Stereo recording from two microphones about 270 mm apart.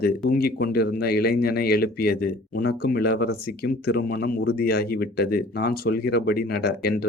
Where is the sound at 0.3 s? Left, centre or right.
Left.